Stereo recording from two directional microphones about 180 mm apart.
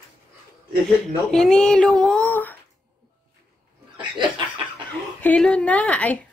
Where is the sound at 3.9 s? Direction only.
25° right (ahead or behind).